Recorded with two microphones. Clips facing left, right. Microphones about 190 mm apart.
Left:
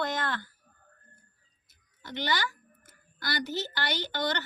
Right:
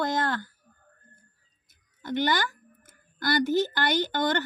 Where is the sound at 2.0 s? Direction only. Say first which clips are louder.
Right 6 dB; 50° right (ahead or behind).